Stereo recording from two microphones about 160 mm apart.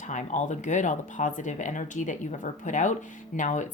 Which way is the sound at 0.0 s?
50° left (ahead or behind).